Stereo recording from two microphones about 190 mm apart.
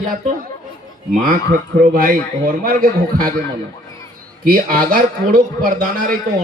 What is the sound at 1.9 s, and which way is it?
A man's voice, 50° right (ahead or behind).